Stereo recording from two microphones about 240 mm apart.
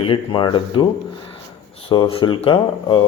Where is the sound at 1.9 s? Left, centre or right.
Left.